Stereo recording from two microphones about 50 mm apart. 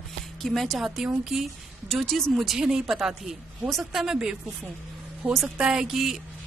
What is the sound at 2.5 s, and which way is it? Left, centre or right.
Speech, centre.